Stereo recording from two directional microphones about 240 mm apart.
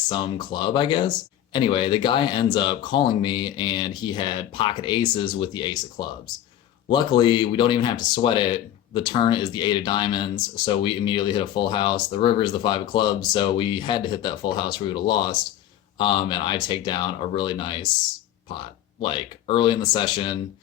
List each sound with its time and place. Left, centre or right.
0.1 s speech: centre
19.0 s speech: left